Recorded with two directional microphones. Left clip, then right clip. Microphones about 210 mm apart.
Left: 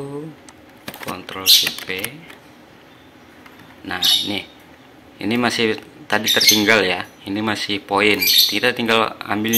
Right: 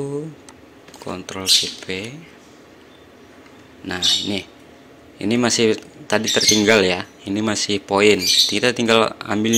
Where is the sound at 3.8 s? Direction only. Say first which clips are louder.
Left 2 dB; 35° right (ahead or behind).